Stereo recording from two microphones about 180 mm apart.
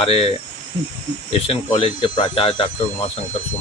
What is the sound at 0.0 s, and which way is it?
Speech, 30° left (ahead or behind).